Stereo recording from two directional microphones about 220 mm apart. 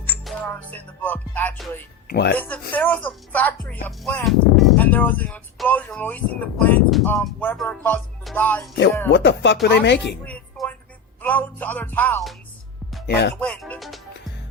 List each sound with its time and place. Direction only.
0.1 s music: 5° left (ahead or behind)
2.0 s speech: 45° left (ahead or behind)
2.4 s speech: 10° left (ahead or behind)
9.1 s music: 55° left (ahead or behind)
9.6 s speech: 50° left (ahead or behind)
10.2 s music: 5° left (ahead or behind)
11.2 s speech: 10° left (ahead or behind)
13.1 s music: 50° left (ahead or behind)
13.3 s speech: 5° left (ahead or behind)